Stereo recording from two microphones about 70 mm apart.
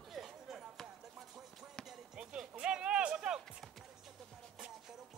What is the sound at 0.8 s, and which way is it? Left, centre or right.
Music, centre.